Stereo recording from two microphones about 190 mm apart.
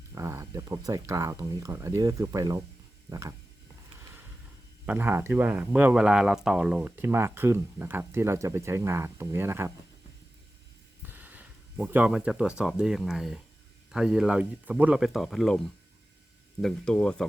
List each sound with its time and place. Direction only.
0.1 s speech: 15° right (ahead or behind)
4.9 s speech: 10° right (ahead or behind)
11.0 s speech: 10° right (ahead or behind)